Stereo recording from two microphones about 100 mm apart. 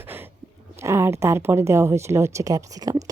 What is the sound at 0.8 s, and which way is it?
A woman's voice, 25° right (ahead or behind).